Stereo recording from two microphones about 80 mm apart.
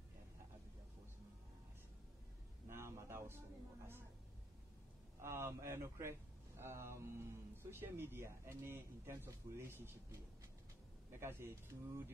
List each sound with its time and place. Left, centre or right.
2.7 s a sound: right
5.2 s a man's voice: right
11.1 s a man's voice: right